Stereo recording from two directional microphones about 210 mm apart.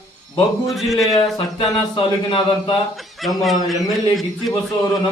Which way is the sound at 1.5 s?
15° left (ahead or behind).